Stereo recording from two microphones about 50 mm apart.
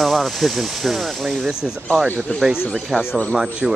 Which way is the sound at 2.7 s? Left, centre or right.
Centre.